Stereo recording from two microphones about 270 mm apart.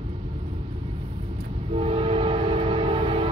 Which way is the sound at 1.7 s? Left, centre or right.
Right.